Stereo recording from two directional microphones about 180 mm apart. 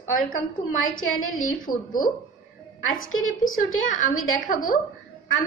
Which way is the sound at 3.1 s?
90° left.